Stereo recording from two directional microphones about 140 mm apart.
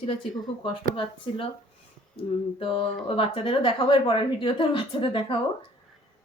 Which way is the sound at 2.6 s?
40° left (ahead or behind).